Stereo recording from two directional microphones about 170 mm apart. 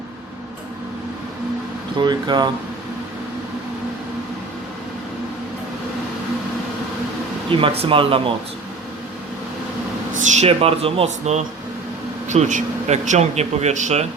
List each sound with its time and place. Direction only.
2.0 s speech: 25° right (ahead or behind)
7.5 s speech: 30° right (ahead or behind)
10.2 s speech: 45° right (ahead or behind)